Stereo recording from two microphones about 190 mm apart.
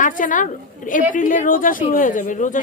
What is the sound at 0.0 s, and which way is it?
A woman's voice, 45° left (ahead or behind).